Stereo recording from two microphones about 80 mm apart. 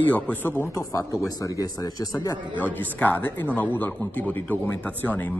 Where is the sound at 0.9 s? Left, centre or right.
Left.